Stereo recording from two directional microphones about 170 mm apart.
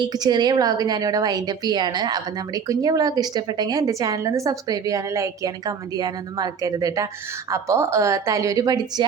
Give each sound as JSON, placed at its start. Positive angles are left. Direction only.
{"t": 0.0, "sound": "a woman's voice", "side_deg": -25}